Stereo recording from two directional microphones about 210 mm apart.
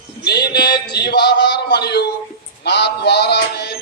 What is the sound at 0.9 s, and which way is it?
Speech, 50° left (ahead or behind).